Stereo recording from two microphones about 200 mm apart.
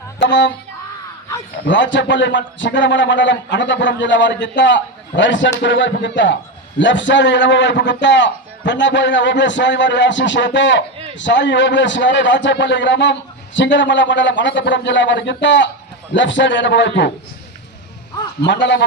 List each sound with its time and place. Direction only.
0.2 s a man's voice: 65° left (ahead or behind)
1.6 s a man's voice: 65° left (ahead or behind)
18.4 s a man's voice: 60° left (ahead or behind)